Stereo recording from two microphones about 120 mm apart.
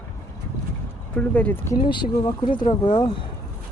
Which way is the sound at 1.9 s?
40° left (ahead or behind).